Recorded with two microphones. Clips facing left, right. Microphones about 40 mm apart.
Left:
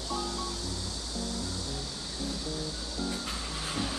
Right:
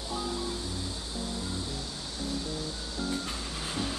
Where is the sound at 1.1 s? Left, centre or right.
Right.